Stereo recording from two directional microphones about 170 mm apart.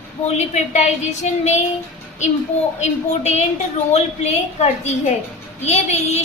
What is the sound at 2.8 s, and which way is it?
Speech, 45° left (ahead or behind).